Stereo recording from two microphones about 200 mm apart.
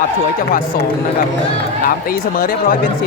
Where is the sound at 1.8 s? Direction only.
45° left (ahead or behind).